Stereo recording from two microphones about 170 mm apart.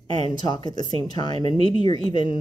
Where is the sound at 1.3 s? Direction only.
35° right (ahead or behind).